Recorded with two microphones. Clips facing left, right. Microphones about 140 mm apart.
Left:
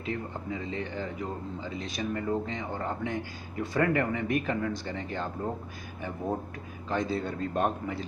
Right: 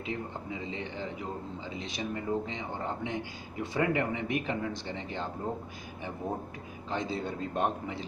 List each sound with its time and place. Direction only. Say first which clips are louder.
0.0 s speech: left 2 dB; 20° right (ahead or behind)
6.9 s speech: left 3 dB; 20° right (ahead or behind)